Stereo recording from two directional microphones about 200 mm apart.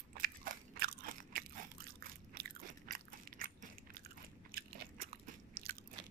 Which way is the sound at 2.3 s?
50° right (ahead or behind).